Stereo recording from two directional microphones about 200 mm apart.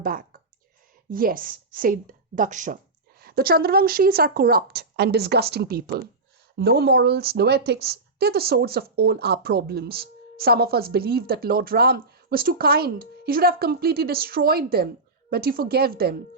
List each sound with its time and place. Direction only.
0.0 s a woman's voice: 45° right (ahead or behind)